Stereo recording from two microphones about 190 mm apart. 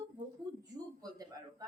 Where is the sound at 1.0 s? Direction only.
20° right (ahead or behind).